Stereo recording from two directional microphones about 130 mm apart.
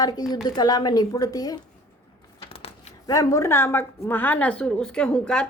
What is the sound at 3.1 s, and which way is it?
A woman's voice, 25° left (ahead or behind).